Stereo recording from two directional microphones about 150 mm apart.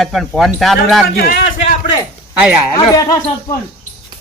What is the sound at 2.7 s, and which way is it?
Speech, 25° left (ahead or behind).